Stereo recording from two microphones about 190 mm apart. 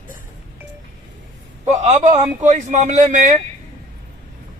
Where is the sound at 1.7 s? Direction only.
35° right (ahead or behind).